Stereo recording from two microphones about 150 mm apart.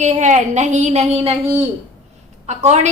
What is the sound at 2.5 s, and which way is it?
Speech, 50° right (ahead or behind).